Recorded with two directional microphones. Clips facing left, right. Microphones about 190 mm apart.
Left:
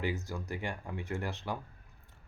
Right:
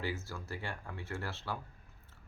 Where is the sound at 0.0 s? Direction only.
15° left (ahead or behind).